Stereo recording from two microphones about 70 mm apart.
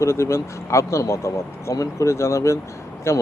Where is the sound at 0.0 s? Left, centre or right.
Left.